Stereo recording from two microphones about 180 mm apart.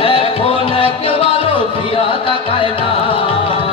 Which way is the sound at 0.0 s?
30° left (ahead or behind).